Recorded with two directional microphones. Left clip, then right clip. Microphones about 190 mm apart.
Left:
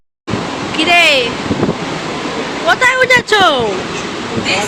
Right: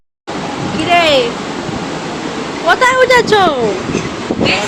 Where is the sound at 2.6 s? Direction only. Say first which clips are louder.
Right 1 dB; 15° right (ahead or behind).